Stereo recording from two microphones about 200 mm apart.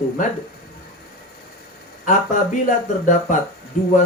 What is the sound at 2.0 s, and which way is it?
Speech, 40° left (ahead or behind).